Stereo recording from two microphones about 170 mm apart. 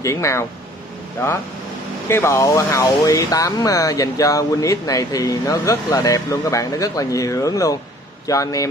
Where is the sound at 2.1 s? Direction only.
15° left (ahead or behind).